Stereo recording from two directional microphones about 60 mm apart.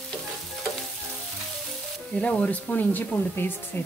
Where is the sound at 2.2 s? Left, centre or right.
Left.